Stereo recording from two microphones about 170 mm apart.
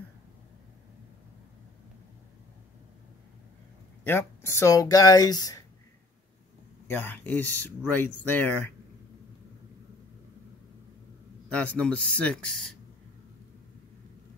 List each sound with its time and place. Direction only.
4.0 s speech: 15° left (ahead or behind)
6.9 s speech: 10° left (ahead or behind)
11.5 s speech: 10° left (ahead or behind)